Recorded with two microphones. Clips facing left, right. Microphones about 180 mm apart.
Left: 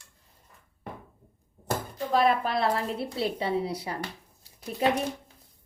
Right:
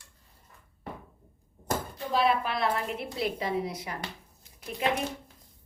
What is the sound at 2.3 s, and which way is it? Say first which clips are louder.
Speech: left 2 dB; 40° left (ahead or behind).